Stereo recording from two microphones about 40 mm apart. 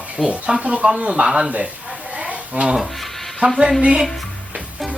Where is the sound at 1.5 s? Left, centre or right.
Right.